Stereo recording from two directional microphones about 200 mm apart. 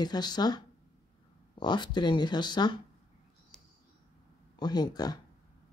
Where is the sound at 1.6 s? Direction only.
20° left (ahead or behind).